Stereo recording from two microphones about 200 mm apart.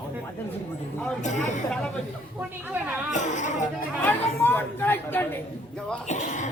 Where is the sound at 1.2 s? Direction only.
35° left (ahead or behind).